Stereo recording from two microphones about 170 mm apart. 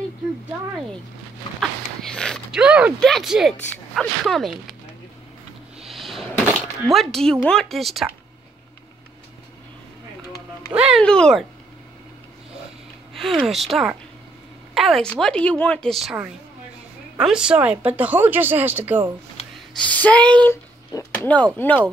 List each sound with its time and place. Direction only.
2.1 s a woman's voice: 5° left (ahead or behind)
5.8 s a sound: centre (ahead or behind)
10.7 s a woman's voice: 10° right (ahead or behind)
11.0 s a woman's voice: 5° left (ahead or behind)
13.1 s a woman's voice: centre (ahead or behind)
19.8 s speech: 10° left (ahead or behind)